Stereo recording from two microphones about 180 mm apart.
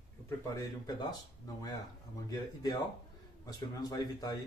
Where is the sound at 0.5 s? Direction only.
20° left (ahead or behind).